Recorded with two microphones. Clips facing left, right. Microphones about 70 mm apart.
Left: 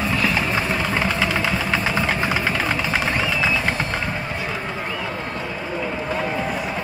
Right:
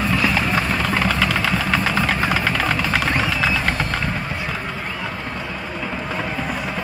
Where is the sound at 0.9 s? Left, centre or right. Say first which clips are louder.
Right 2 dB; centre.